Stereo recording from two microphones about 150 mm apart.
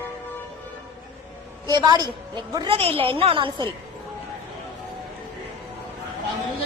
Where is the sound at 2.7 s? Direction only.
40° right (ahead or behind).